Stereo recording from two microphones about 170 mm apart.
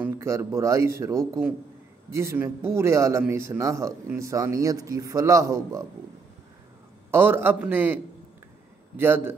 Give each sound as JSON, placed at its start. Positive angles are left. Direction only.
{"t": 0.0, "sound": "speech", "side_deg": -15}
{"t": 7.1, "sound": "speech", "side_deg": -15}